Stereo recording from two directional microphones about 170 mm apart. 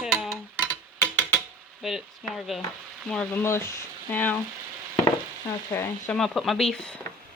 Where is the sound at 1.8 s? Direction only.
Centre (ahead or behind).